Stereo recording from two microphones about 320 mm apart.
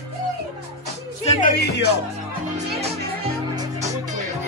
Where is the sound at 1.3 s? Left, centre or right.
Left.